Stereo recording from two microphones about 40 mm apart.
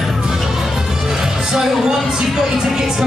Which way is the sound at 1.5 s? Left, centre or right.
Centre.